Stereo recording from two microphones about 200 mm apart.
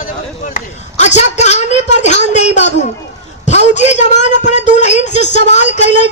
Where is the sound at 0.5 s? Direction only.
35° left (ahead or behind).